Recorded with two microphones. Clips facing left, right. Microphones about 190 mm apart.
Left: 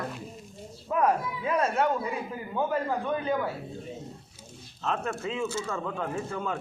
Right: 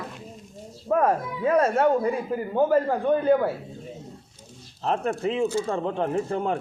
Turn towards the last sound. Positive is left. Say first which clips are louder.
# right 7 dB
turn(degrees=-30)  # may be behind; listen again after turning